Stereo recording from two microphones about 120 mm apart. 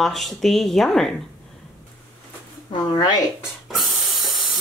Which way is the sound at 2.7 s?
35° left (ahead or behind).